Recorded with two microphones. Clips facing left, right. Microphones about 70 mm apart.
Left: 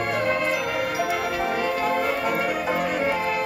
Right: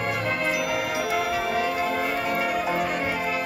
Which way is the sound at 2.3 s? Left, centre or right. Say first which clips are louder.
Left 1 dB; centre.